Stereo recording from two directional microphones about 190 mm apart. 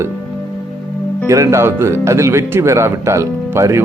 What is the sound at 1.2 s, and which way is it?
A man's voice, 15° right (ahead or behind).